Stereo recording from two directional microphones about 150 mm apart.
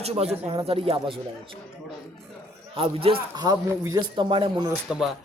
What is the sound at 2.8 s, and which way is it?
Speech, 40° right (ahead or behind).